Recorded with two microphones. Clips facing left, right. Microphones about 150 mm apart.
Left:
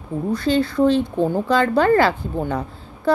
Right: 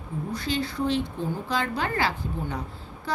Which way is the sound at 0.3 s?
60° left (ahead or behind).